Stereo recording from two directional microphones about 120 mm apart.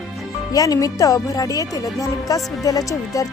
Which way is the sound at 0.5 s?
30° left (ahead or behind).